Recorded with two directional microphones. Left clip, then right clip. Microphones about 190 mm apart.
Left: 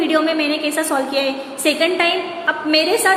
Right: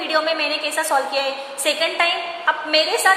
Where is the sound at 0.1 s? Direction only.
5° right (ahead or behind).